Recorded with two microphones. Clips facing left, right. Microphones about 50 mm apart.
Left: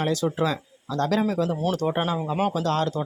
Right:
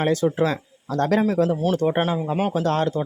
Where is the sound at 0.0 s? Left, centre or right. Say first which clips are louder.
Right 4 dB; right.